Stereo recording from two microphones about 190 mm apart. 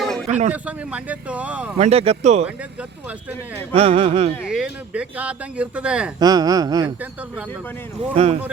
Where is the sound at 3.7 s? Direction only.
30° right (ahead or behind).